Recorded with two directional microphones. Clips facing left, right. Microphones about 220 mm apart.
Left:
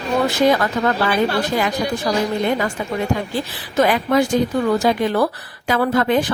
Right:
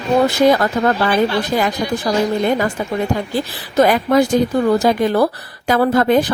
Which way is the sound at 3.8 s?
40° right (ahead or behind).